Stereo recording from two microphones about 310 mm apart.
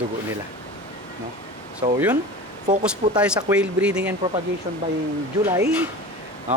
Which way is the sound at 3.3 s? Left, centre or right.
Centre.